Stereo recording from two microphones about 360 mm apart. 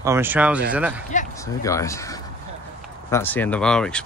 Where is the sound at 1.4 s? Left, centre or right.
Centre.